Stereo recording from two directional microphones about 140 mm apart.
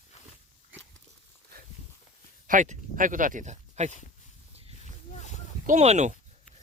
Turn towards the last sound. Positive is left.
turn(degrees=-55)  # may be behind; listen again after turning